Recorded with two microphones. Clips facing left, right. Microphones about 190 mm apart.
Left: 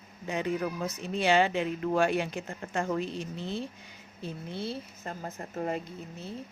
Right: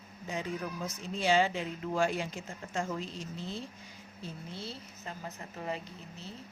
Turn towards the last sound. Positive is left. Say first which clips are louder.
# left 6 dB
turn(degrees=50)  # may be behind; listen again after turning